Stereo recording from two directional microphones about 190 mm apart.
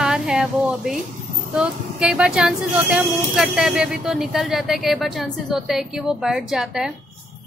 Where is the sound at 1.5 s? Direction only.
5° right (ahead or behind).